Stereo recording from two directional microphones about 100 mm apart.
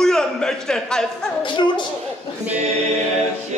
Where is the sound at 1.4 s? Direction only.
50° left (ahead or behind).